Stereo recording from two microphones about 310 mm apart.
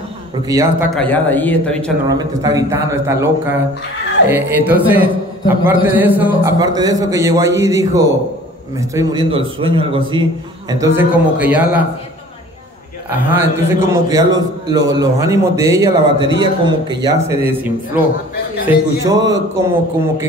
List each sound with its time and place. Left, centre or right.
0.5 s a man's voice: centre
0.9 s a man's voice: centre
2.0 s a man's voice: centre
13.1 s a man's voice: centre